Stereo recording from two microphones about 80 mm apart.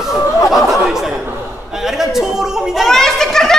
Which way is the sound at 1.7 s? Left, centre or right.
Centre.